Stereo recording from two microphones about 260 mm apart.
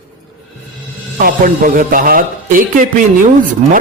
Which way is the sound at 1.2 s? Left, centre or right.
Right.